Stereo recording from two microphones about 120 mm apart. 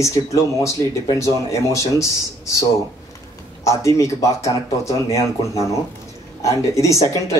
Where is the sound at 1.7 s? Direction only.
25° left (ahead or behind).